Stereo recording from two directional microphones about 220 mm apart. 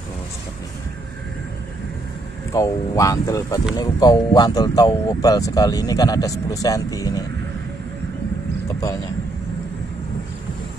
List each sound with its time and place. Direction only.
2.5 s speech: 15° left (ahead or behind)